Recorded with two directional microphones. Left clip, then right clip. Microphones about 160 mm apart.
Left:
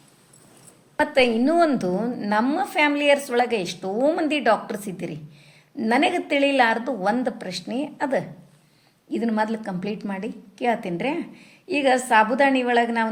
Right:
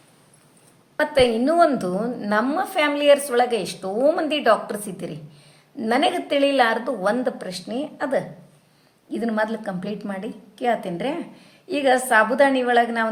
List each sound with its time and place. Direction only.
0.9 s a woman's voice: 20° left (ahead or behind)